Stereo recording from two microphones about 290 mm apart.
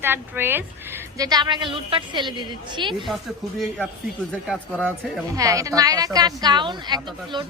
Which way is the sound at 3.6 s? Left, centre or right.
Centre.